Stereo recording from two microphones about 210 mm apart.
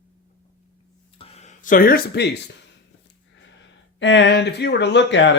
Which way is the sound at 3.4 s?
60° left (ahead or behind).